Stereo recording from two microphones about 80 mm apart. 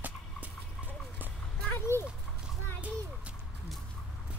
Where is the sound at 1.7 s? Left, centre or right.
Left.